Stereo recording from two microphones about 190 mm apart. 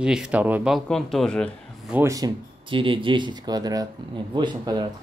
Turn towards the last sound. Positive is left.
turn(degrees=-20)  # may be behind; listen again after turning